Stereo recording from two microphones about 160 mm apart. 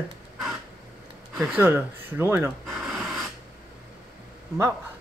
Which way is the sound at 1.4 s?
10° right (ahead or behind).